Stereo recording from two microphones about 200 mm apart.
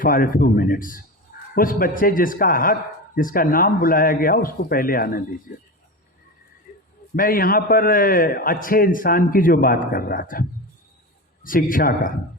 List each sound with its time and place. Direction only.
0.0 s a man's voice: 45° left (ahead or behind)
7.2 s a man's voice: 45° left (ahead or behind)
11.4 s a man's voice: 45° left (ahead or behind)